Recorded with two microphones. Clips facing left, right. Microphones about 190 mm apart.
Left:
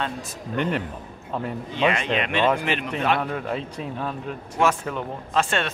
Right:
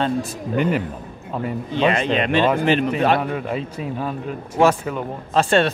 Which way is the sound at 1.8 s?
35° right (ahead or behind).